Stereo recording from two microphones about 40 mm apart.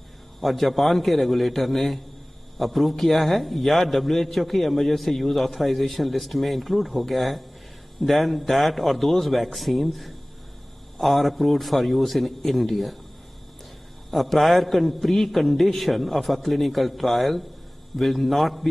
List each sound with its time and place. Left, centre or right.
0.4 s a man's voice: centre
14.1 s a man's voice: centre